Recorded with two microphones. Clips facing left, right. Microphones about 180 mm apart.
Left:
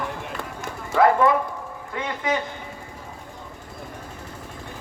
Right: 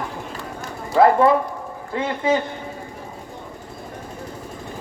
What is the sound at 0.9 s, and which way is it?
A man's voice, 30° right (ahead or behind).